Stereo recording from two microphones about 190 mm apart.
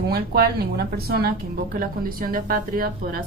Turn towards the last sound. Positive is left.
turn(degrees=-50)  # may be behind; listen again after turning